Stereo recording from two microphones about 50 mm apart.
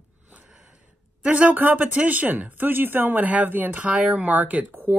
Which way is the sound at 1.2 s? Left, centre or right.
Right.